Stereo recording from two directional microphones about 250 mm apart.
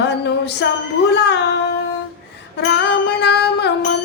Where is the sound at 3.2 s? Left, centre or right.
Left.